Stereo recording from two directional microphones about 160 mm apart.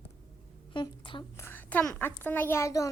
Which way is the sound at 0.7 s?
30° left (ahead or behind).